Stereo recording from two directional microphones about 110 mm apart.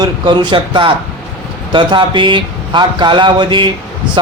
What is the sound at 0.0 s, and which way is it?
A man's voice, 40° right (ahead or behind).